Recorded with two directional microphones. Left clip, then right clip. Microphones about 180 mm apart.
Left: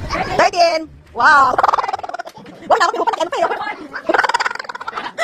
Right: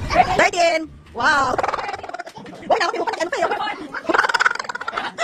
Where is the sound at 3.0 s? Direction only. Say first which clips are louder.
Left 4 dB; centre (ahead or behind).